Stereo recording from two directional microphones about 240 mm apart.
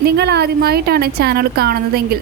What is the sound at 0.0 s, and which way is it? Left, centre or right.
A woman's voice, right.